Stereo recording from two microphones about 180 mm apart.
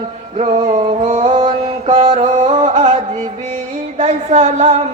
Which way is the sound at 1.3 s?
25° right (ahead or behind).